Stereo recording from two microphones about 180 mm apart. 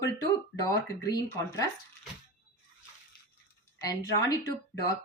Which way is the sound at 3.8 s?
20° left (ahead or behind).